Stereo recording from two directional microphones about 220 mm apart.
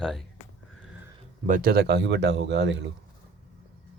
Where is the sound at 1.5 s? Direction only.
40° right (ahead or behind).